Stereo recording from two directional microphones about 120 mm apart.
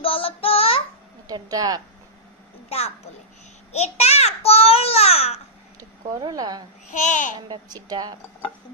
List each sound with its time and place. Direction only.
0.0 s child singing: 50° left (ahead or behind)
1.2 s speech: 30° right (ahead or behind)
3.7 s a child's voice: 70° left (ahead or behind)
5.8 s speech: 30° right (ahead or behind)
6.9 s a child's voice: 90° left
7.4 s a woman's voice: 35° right (ahead or behind)